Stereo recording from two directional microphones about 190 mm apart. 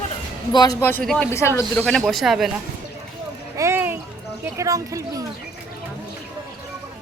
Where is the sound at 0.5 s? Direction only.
20° left (ahead or behind); by 1.3 s 5° left (ahead or behind).